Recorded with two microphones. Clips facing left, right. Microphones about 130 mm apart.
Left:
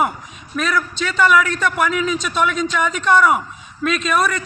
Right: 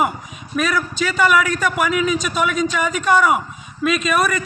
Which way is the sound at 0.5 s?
5° right (ahead or behind).